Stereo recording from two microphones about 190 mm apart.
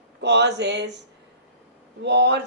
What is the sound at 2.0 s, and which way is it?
Speech, 65° right (ahead or behind).